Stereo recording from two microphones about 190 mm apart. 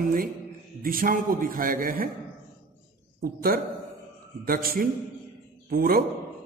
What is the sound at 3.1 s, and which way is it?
A man's voice, 50° right (ahead or behind).